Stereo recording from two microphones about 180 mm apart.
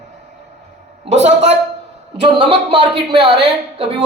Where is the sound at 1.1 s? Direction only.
35° right (ahead or behind).